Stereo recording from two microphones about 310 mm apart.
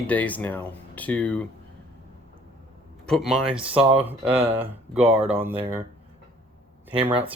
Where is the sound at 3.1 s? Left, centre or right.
Centre.